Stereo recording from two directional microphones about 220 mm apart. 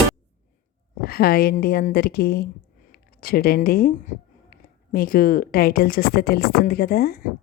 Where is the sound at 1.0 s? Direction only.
45° left (ahead or behind).